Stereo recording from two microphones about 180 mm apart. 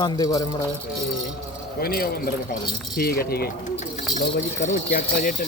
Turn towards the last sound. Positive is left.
turn(degrees=55)  # may be behind; listen again after turning